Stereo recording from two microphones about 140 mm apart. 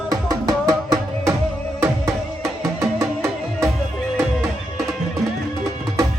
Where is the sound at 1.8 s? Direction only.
20° right (ahead or behind).